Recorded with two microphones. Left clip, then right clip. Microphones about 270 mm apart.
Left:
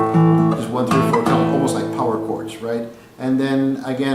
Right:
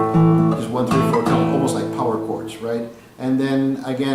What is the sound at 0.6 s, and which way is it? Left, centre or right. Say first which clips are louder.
Music: left 1 dB; centre.